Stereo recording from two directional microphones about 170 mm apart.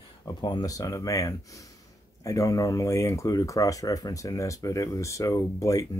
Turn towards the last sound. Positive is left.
turn(degrees=20)  # may be behind; listen again after turning